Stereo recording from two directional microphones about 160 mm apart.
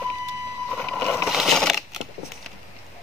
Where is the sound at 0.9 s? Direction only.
Centre (ahead or behind).